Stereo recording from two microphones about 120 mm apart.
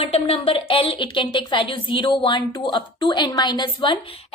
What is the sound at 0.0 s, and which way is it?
Speech, 55° left (ahead or behind).